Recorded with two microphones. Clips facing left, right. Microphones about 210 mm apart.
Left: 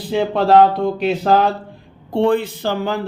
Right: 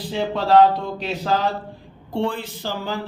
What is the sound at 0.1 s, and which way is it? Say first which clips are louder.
A man's voice: left 4 dB; 55° left (ahead or behind).